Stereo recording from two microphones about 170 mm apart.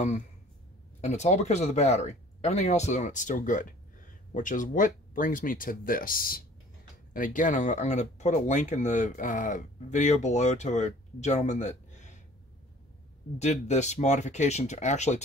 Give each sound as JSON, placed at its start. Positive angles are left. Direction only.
{"t": 1.0, "sound": "speech", "side_deg": 40}
{"t": 13.4, "sound": "speech", "side_deg": 40}